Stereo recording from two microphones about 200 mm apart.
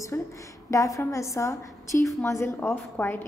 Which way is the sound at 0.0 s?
15° left (ahead or behind).